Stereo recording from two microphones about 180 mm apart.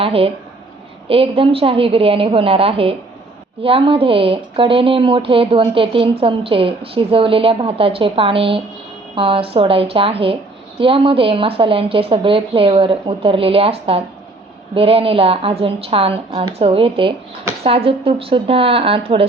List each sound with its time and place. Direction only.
0.0 s a woman's voice: 30° right (ahead or behind)